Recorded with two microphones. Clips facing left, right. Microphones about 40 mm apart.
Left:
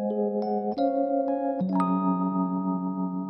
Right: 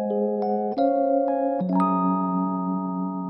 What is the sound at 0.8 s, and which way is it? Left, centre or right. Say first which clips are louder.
Music: right 5 dB; centre.